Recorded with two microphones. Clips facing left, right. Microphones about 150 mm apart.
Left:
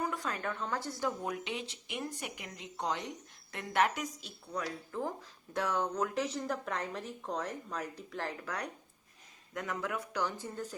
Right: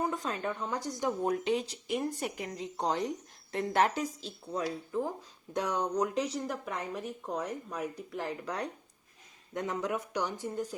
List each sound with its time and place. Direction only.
0.0 s speech: 20° right (ahead or behind)
1.2 s speech: 35° right (ahead or behind); by 10.8 s 15° right (ahead or behind)